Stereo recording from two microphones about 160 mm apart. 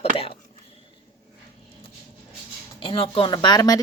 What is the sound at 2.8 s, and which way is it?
Speech, 35° left (ahead or behind).